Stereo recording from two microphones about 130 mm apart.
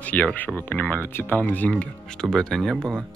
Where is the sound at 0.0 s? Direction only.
10° left (ahead or behind).